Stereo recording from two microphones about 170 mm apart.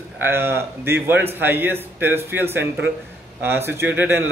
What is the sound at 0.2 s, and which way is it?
A man's voice, 15° right (ahead or behind).